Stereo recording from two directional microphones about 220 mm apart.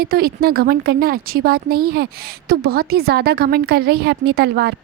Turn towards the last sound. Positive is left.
turn(degrees=-45)  # may be behind; listen again after turning